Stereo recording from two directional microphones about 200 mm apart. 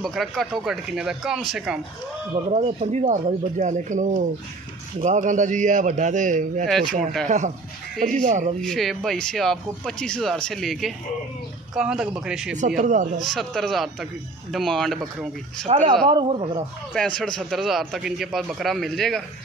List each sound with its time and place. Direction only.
0.0 s speech: centre (ahead or behind)
2.5 s speech: 35° right (ahead or behind)
8.5 s speech: centre (ahead or behind)
12.5 s speech: 40° right (ahead or behind)
13.2 s speech: centre (ahead or behind)
15.6 s speech: 30° right (ahead or behind)
16.9 s speech: 5° left (ahead or behind)